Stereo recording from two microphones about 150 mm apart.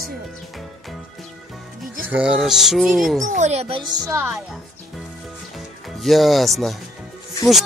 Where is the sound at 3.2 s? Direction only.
55° right (ahead or behind); by 4.2 s 25° right (ahead or behind).